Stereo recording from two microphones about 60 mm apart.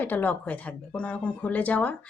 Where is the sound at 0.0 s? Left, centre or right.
Left.